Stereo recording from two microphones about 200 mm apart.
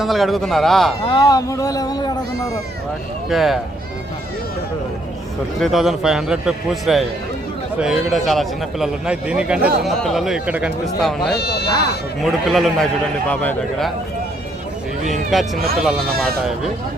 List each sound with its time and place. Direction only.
0.0 s a man's voice: centre (ahead or behind)
1.0 s speech: 20° left (ahead or behind)
3.2 s a man's voice: centre (ahead or behind)
5.5 s a man's voice: centre (ahead or behind)
11.3 s speech: 55° left (ahead or behind)
12.2 s a man's voice: centre (ahead or behind)
15.1 s a man's voice: centre (ahead or behind)